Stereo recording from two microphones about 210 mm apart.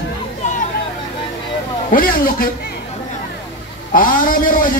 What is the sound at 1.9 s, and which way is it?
Speech, 45° left (ahead or behind).